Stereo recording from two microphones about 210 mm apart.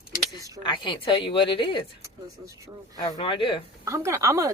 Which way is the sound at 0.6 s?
25° left (ahead or behind).